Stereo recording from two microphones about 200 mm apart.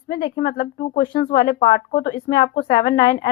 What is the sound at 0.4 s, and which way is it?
A woman's voice, 50° left (ahead or behind).